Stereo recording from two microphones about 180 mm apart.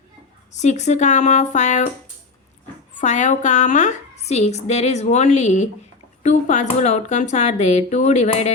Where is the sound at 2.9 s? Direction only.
40° left (ahead or behind).